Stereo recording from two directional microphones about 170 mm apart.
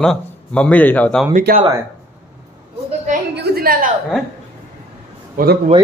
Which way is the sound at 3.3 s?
70° right (ahead or behind).